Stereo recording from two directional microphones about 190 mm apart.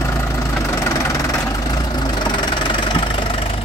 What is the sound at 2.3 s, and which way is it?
Engine, 25° left (ahead or behind).